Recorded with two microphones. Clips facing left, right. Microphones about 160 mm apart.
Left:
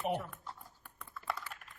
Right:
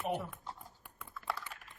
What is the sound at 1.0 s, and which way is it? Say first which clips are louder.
Computer keyboard: even; centre (ahead or behind).